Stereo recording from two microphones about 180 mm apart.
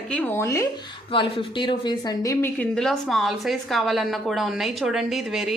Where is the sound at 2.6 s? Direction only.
5° left (ahead or behind).